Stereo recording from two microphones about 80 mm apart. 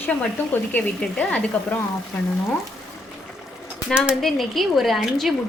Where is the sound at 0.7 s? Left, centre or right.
Left.